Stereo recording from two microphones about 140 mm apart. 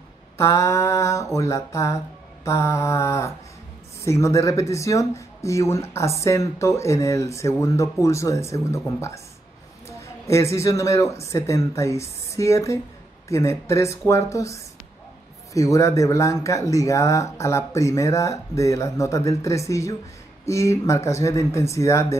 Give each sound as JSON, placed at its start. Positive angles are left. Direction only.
{"t": 0.4, "sound": "speech", "side_deg": 20}